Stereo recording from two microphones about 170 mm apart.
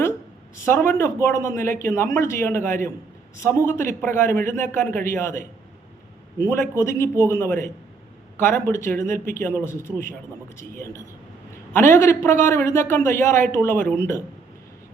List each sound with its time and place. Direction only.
0.5 s speech: 15° left (ahead or behind)